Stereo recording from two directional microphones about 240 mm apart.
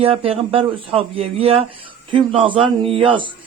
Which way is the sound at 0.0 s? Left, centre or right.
Right.